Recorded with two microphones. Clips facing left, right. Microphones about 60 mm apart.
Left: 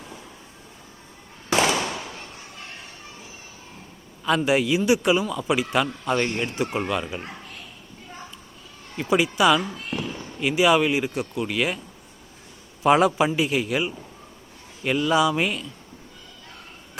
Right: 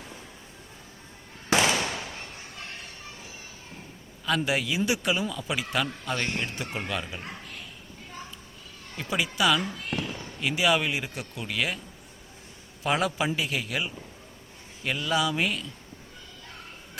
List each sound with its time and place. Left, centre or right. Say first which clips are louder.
1.5 s firecracker: left 3 dB; left
4.3 s speech: left 6 dB; centre
9.0 s speech: left 7 dB; centre
12.8 s speech: left 8 dB; centre